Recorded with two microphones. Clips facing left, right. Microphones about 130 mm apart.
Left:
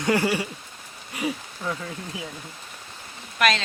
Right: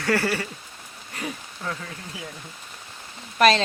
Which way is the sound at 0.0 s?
15° left (ahead or behind).